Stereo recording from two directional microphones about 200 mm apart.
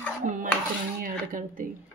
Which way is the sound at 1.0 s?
40° right (ahead or behind).